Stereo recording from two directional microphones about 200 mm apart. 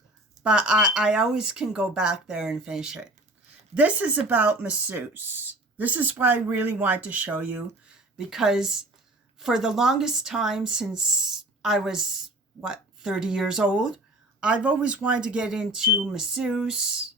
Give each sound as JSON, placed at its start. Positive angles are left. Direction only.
{"t": 0.4, "sound": "speech", "side_deg": -5}